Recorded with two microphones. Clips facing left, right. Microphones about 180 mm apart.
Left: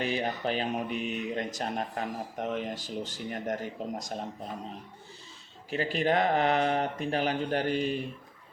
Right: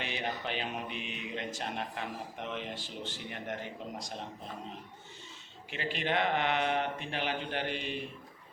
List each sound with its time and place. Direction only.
0.0 s speech: 40° left (ahead or behind)
5.7 s speech: 40° left (ahead or behind)